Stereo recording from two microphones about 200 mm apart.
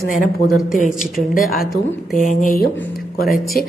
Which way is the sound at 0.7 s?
40° left (ahead or behind).